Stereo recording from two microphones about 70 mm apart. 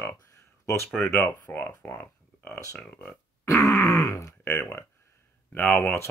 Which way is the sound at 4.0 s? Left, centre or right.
Left.